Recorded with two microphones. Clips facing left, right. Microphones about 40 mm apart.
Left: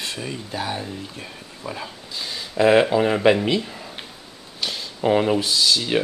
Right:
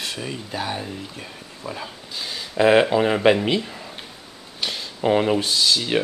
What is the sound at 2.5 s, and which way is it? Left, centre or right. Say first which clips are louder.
Speech: even; centre.